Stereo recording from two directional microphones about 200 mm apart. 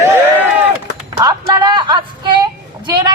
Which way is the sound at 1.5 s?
25° right (ahead or behind).